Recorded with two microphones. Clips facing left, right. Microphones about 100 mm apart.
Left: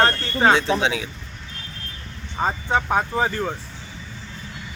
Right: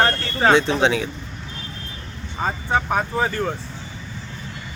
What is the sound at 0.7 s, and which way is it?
Speech, 5° left (ahead or behind).